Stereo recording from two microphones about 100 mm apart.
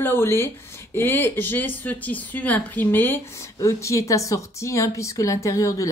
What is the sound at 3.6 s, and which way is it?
Speech, 30° left (ahead or behind).